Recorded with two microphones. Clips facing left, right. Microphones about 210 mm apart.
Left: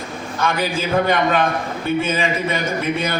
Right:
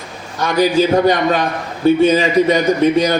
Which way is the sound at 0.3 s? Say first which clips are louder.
Right 8 dB; 40° right (ahead or behind).